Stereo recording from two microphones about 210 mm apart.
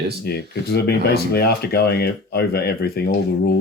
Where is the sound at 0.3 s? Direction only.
50° left (ahead or behind).